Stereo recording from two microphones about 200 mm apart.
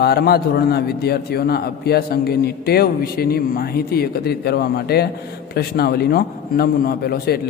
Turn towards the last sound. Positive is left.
turn(degrees=50)  # may be behind; listen again after turning